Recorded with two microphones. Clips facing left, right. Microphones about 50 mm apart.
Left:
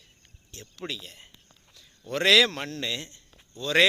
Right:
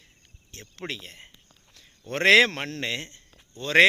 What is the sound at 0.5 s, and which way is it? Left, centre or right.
A man's voice, right.